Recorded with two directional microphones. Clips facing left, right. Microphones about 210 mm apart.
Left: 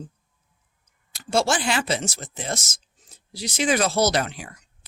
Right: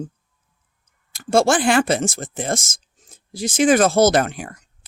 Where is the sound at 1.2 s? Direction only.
50° right (ahead or behind).